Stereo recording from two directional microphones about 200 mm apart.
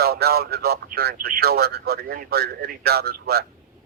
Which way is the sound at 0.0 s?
50° right (ahead or behind).